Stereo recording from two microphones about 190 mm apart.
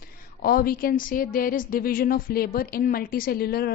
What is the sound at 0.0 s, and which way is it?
A woman's voice, 50° left (ahead or behind).